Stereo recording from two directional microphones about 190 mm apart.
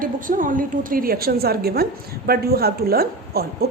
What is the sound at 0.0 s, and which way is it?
A woman's voice, 45° right (ahead or behind).